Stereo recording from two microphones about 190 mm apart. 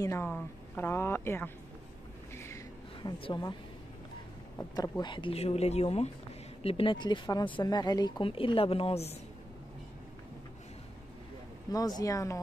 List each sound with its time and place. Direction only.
0.0 s a sound: 15° left (ahead or behind)
3.0 s speech: 25° left (ahead or behind)
4.7 s speech: 20° left (ahead or behind)
12.0 s speech: 15° left (ahead or behind)